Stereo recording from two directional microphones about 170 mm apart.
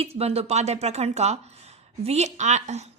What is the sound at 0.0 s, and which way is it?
A woman's voice, 35° right (ahead or behind).